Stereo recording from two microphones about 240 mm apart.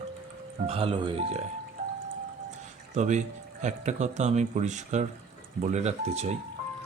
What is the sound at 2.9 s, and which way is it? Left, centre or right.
Speech, right.